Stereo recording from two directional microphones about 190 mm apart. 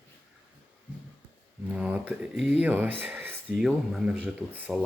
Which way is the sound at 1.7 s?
5° right (ahead or behind).